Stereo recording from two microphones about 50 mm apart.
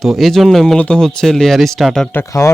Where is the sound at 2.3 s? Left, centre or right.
Left.